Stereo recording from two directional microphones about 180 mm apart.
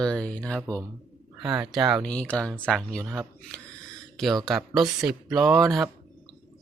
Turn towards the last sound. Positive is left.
turn(degrees=0)  # may be behind; listen again after turning